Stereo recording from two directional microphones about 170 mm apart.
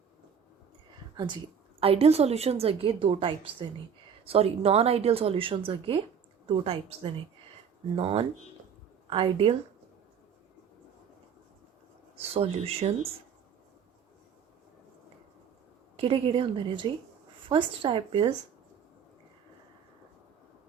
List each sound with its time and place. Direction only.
1.1 s a woman's voice: 25° right (ahead or behind)
12.1 s a woman's voice: 35° right (ahead or behind)
16.0 s a woman's voice: 30° right (ahead or behind)